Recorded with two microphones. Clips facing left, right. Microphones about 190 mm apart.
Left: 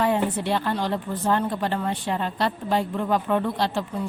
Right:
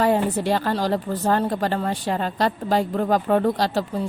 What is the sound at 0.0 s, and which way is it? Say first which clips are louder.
Speech: right 3 dB; 40° right (ahead or behind).